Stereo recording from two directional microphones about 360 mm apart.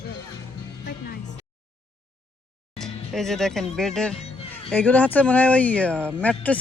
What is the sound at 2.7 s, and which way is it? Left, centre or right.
Speech, centre.